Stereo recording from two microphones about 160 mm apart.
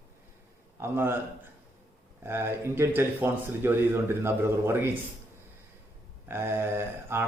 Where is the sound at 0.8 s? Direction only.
15° right (ahead or behind).